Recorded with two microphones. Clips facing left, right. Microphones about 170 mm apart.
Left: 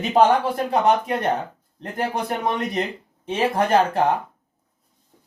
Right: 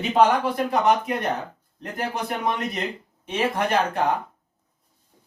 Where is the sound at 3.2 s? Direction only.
30° left (ahead or behind).